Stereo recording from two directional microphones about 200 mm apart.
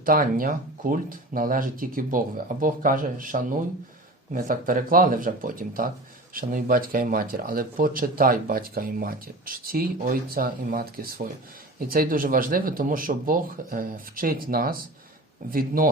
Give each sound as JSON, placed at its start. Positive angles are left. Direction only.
{"t": 0.0, "sound": "speech", "side_deg": -45}